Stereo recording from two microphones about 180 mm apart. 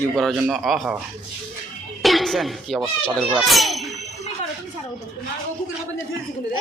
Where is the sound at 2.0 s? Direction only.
Centre (ahead or behind).